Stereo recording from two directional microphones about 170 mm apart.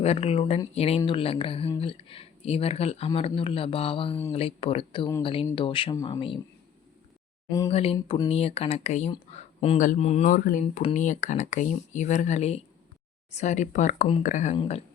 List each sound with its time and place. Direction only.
0.0 s speech: 40° left (ahead or behind)
7.7 s speech: 35° left (ahead or behind)
14.5 s speech: 30° left (ahead or behind)